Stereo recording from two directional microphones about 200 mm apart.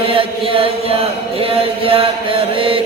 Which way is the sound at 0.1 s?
25° right (ahead or behind).